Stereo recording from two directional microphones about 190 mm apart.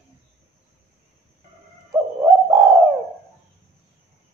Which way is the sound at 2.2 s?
15° right (ahead or behind).